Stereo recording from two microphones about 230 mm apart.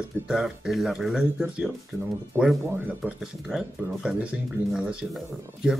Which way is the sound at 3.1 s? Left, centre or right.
Centre.